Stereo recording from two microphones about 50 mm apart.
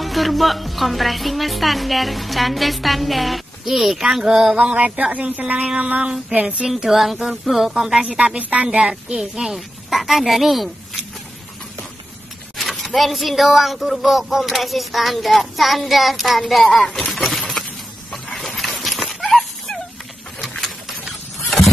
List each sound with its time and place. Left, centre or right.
0.0 s a woman's voice: centre
4.6 s speech: right
6.7 s a woman's voice: centre
12.5 s a woman's voice: centre
17.1 s a sound: centre
18.6 s dog: centre